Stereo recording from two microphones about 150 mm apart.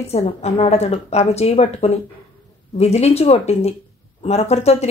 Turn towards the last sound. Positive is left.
turn(degrees=45)  # may be behind; listen again after turning